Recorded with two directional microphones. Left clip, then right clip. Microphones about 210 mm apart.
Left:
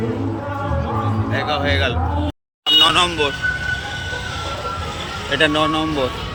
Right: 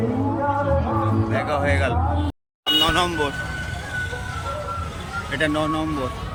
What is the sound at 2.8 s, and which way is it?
Speech, 10° right (ahead or behind).